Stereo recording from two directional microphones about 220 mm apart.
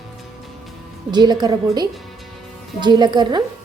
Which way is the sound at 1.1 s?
20° right (ahead or behind).